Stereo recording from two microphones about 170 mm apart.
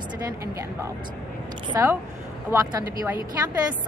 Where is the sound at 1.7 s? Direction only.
15° right (ahead or behind).